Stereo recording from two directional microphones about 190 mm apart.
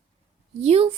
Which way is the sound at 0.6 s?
30° right (ahead or behind).